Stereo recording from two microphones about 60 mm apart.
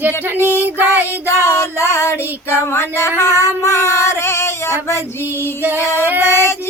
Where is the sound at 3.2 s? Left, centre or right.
Left.